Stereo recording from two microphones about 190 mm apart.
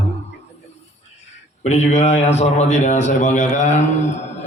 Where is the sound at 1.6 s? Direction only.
35° left (ahead or behind).